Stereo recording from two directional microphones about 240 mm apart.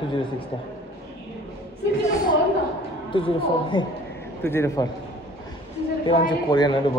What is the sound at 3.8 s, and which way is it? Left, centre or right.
A woman's voice, centre.